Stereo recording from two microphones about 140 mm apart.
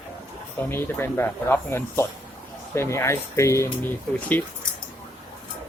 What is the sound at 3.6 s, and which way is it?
Speech, 10° left (ahead or behind).